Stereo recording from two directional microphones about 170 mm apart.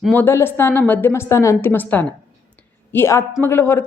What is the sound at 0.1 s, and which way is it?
Speech, 10° left (ahead or behind).